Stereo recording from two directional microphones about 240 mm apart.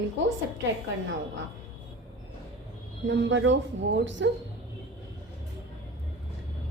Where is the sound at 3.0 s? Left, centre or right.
Right.